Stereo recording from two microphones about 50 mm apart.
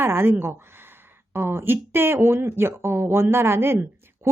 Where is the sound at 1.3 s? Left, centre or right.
Right.